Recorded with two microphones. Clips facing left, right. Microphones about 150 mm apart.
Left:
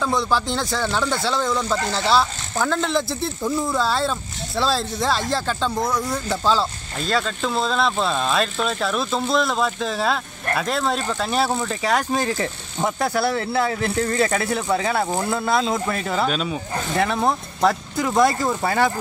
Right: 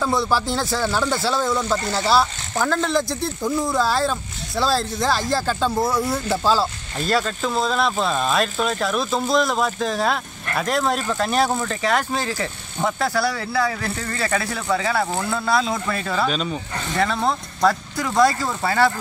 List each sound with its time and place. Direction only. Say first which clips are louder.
0.0 s speech: right 1 dB; 5° right (ahead or behind); by 16.3 s 20° left (ahead or behind)
16.3 s speech: even; 5° left (ahead or behind)
17.0 s speech: even; 15° left (ahead or behind)